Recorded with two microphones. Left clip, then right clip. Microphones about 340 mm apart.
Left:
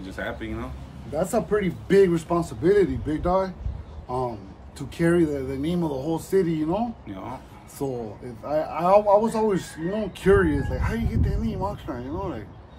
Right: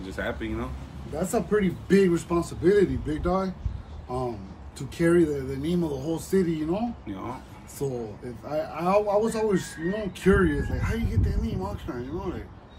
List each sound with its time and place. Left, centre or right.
0.0 s speech: centre
1.1 s speech: left
4.7 s speech: left
7.1 s speech: centre
7.8 s speech: left